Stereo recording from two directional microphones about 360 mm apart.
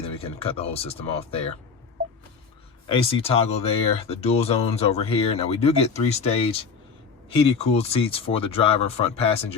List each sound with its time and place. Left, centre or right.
0.0 s speech: centre
2.9 s speech: centre